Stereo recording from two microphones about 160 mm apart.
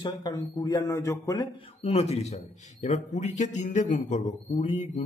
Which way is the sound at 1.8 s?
40° left (ahead or behind).